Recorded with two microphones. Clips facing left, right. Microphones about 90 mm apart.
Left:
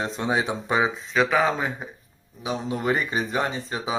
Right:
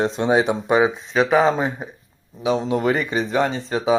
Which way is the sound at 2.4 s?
90° right.